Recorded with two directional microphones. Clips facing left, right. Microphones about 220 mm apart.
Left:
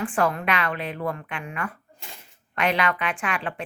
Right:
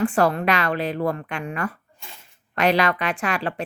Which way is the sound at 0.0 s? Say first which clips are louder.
Right 5 dB; 40° right (ahead or behind).